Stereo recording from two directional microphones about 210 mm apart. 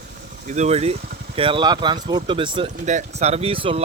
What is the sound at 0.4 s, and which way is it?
Speech, 35° right (ahead or behind).